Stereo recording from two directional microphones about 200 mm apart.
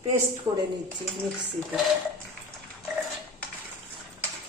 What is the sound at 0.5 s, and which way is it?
Speech, 15° right (ahead or behind).